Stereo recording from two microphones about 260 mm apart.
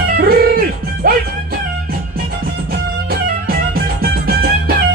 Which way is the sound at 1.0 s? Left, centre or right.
Right.